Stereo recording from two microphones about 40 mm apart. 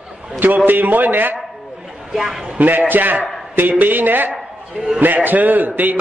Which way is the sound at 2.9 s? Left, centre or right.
Right.